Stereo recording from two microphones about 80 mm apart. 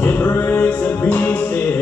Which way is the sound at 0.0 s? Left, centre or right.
Left.